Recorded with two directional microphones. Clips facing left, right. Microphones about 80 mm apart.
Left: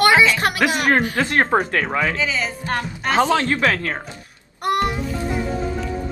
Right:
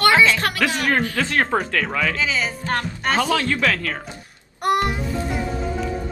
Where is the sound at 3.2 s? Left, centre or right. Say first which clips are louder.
Left 4 dB; left.